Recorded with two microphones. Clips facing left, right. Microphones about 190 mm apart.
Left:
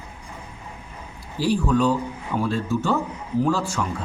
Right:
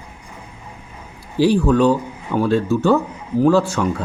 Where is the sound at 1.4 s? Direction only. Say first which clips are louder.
Right 6 dB; 65° right (ahead or behind).